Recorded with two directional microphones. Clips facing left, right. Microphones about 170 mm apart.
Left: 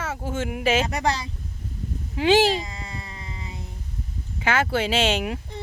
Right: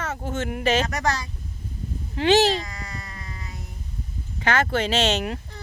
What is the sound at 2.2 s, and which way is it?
Speech, 10° left (ahead or behind).